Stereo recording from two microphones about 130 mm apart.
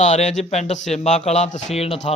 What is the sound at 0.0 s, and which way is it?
A man's voice, 60° left (ahead or behind).